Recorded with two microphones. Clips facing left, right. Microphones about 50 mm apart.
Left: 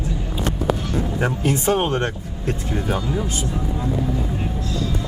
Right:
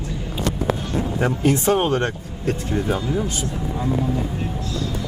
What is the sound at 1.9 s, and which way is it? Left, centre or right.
Speech, left.